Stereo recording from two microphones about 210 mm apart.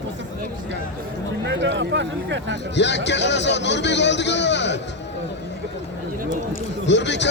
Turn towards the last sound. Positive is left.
turn(degrees=55)  # may be behind; listen again after turning